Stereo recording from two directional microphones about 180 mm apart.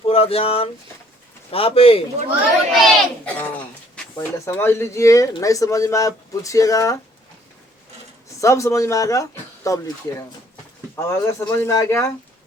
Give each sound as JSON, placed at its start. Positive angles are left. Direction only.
{"t": 0.0, "sound": "speech", "side_deg": 35}
{"t": 2.8, "sound": "a child's voice", "side_deg": 5}
{"t": 8.4, "sound": "speech", "side_deg": 15}